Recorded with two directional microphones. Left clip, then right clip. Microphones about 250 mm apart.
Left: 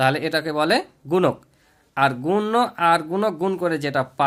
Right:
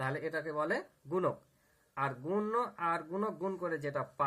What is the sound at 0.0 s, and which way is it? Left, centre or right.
Speech, left.